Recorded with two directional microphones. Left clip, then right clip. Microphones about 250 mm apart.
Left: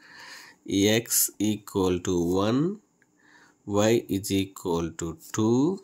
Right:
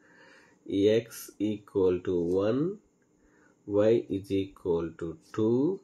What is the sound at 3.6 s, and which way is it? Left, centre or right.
Speech, left.